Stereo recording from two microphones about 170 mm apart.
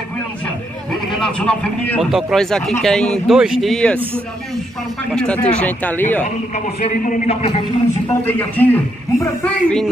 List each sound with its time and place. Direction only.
1.2 s speech: 5° left (ahead or behind)
5.1 s a man's voice: 5° left (ahead or behind)
6.9 s a man's voice: 45° left (ahead or behind)
8.3 s a man's voice: 10° left (ahead or behind)